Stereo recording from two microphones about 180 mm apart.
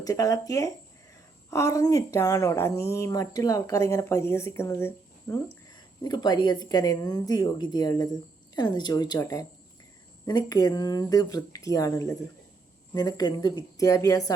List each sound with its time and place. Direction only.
0.0 s a woman's voice: 20° left (ahead or behind)